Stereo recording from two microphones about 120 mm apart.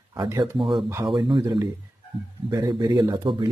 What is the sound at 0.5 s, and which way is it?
A man's voice, 45° right (ahead or behind).